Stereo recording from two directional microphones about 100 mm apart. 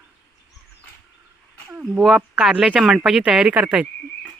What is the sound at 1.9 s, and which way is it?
Speech, centre (ahead or behind).